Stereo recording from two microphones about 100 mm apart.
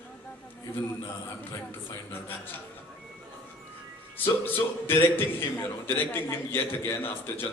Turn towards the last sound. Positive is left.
turn(degrees=25)  # may be behind; listen again after turning